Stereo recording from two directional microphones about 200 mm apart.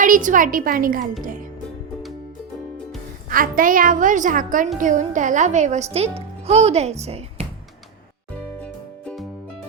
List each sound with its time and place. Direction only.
0.0 s a woman's voice: 40° right (ahead or behind)
3.2 s a woman's voice: 45° right (ahead or behind)
8.6 s music: 5° left (ahead or behind)